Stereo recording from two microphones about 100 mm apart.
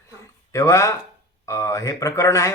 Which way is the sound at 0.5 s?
30° left (ahead or behind).